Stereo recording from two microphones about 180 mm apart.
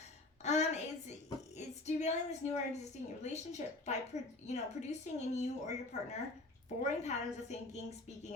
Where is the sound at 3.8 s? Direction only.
40° left (ahead or behind).